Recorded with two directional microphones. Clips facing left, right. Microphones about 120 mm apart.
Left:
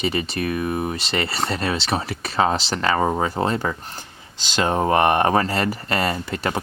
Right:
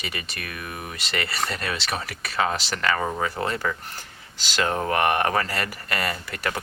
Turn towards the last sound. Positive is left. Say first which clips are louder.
# left 5 dB
turn(degrees=25)  # may be behind; listen again after turning